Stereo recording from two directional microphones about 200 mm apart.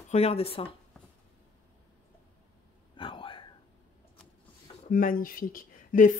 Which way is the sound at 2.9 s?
25° left (ahead or behind).